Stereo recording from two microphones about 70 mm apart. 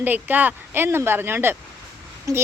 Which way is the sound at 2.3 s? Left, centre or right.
Right.